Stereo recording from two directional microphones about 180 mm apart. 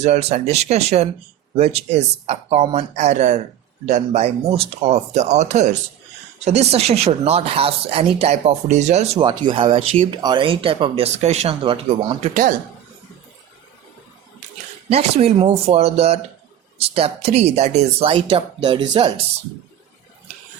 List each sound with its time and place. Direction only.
0.0 s speech: 35° right (ahead or behind)
9.2 s speech: 25° right (ahead or behind)
12.3 s speech: 50° right (ahead or behind)
14.8 s speech: 35° right (ahead or behind)